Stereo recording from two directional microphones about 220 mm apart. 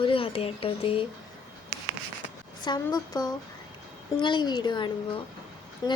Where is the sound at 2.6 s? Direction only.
20° left (ahead or behind).